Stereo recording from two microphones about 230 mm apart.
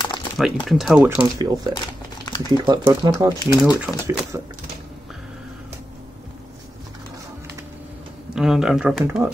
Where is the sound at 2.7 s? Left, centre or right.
Centre.